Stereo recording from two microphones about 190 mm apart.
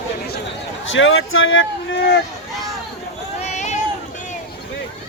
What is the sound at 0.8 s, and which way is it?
Speech, 90° left.